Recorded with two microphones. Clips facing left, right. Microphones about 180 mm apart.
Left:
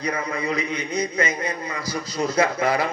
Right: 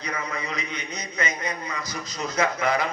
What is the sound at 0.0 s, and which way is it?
A man's voice, 30° left (ahead or behind).